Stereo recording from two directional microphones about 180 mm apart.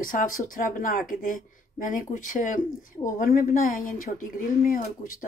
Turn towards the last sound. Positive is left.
turn(degrees=50)  # may be behind; listen again after turning